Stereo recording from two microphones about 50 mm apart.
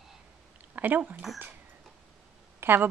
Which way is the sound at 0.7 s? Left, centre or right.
Right.